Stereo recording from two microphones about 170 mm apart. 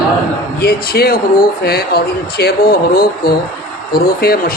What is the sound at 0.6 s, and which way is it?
Speech, 65° left (ahead or behind).